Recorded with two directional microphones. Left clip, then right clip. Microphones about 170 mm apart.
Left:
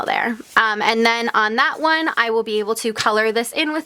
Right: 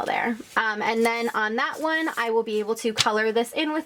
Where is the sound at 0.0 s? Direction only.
35° left (ahead or behind).